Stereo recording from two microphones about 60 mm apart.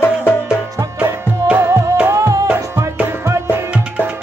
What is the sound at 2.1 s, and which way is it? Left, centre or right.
Music, right.